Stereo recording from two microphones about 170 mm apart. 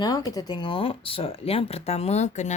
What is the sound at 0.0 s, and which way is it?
Speech, 20° left (ahead or behind).